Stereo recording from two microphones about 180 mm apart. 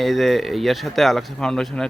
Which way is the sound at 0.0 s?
Centre (ahead or behind).